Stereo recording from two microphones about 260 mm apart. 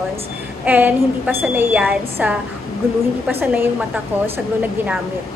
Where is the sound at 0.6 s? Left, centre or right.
Centre.